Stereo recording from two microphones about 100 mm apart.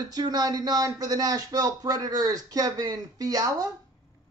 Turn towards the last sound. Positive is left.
turn(degrees=-40)  # may be behind; listen again after turning